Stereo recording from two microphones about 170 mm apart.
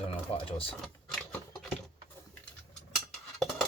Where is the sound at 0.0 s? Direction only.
35° left (ahead or behind).